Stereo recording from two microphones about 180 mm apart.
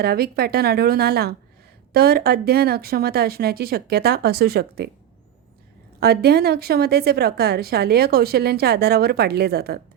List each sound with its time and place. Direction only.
0.0 s a woman's voice: 60° right (ahead or behind)
6.0 s a woman's voice: 60° right (ahead or behind)